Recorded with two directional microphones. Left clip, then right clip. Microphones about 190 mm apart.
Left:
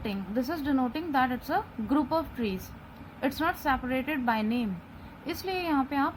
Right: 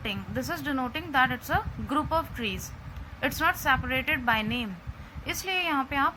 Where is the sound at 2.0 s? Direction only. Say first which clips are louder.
Right 2 dB; 25° right (ahead or behind).